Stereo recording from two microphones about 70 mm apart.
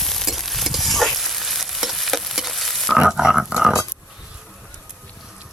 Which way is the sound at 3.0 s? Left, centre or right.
Centre.